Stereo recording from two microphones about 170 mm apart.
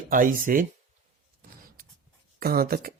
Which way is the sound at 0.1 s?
50° right (ahead or behind).